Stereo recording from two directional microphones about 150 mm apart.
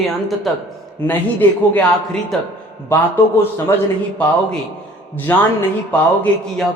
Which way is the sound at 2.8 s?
15° left (ahead or behind).